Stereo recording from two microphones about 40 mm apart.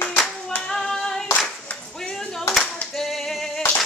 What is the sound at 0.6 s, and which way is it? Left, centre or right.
Singing, centre.